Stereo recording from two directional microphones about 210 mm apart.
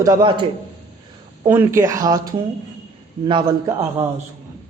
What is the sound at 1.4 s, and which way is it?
A man's voice, 10° right (ahead or behind).